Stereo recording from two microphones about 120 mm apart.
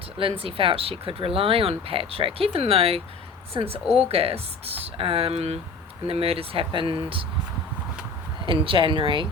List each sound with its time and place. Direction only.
0.2 s speech: 50° right (ahead or behind)
8.6 s speech: 45° right (ahead or behind)